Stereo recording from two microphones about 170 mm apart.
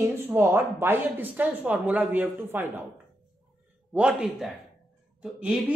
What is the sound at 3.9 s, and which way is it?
A man's voice, 5° right (ahead or behind).